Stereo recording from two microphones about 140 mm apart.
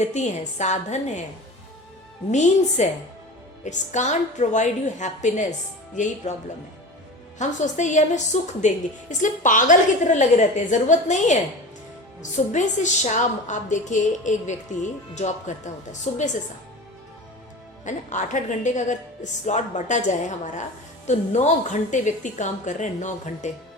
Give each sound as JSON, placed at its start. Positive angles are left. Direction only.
{"t": 0.0, "sound": "a woman's voice", "side_deg": 55}
{"t": 2.3, "sound": "a woman's voice", "side_deg": 55}
{"t": 12.5, "sound": "a woman's voice", "side_deg": 60}
{"t": 17.8, "sound": "a woman's voice", "side_deg": 60}